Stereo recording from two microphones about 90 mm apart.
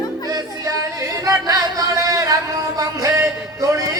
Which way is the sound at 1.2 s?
40° right (ahead or behind).